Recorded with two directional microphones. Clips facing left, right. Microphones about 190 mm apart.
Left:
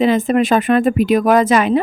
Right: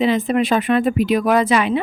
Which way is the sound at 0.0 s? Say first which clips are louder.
Left 3 dB; 45° left (ahead or behind).